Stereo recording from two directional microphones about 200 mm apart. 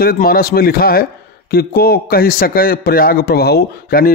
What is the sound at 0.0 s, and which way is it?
A man's voice, 50° left (ahead or behind).